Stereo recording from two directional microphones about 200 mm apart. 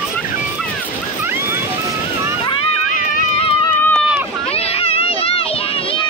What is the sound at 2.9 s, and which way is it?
Horse, 40° left (ahead or behind).